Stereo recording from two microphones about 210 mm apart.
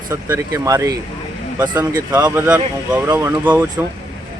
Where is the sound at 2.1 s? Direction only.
20° right (ahead or behind).